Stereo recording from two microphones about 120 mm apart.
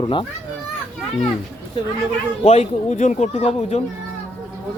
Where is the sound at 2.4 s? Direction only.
65° left (ahead or behind).